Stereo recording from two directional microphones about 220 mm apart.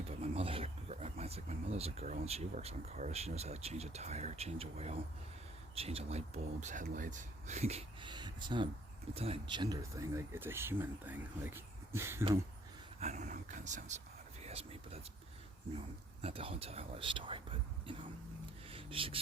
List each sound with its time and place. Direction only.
0.1 s speech: 30° right (ahead or behind); by 12.2 s 10° right (ahead or behind)
13.0 s speech: 30° right (ahead or behind)
16.2 s speech: 25° right (ahead or behind)
18.7 s a sound: 25° right (ahead or behind)